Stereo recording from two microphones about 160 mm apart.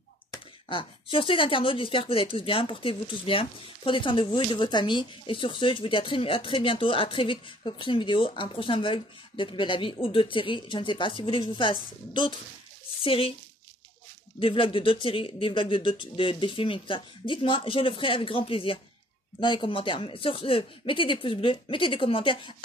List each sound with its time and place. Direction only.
0.7 s speech: 35° left (ahead or behind)
14.4 s speech: 35° left (ahead or behind)